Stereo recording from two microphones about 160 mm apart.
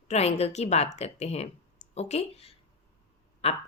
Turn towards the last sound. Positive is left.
turn(degrees=40)  # may be behind; listen again after turning